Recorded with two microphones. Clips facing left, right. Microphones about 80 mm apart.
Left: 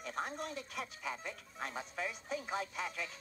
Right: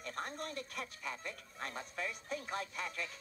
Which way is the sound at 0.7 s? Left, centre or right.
Left.